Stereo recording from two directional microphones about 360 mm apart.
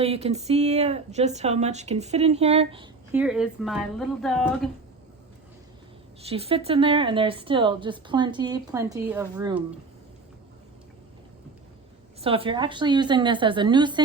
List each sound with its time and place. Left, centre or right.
0.0 s speech: centre
6.2 s speech: centre
12.2 s speech: centre